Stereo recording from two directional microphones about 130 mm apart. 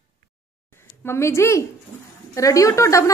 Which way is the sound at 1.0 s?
20° left (ahead or behind).